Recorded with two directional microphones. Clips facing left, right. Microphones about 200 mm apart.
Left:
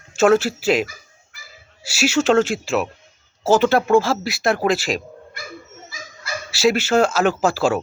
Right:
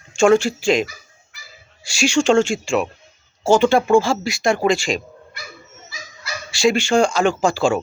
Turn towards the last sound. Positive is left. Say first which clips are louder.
# right 1 dB
turn(degrees=5)  # may be behind; listen again after turning